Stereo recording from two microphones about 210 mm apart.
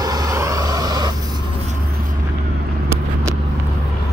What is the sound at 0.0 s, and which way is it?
Vehicle, 20° right (ahead or behind).